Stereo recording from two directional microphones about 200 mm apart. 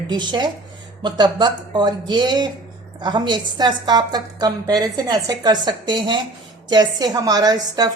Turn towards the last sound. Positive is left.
turn(degrees=-20)  # may be behind; listen again after turning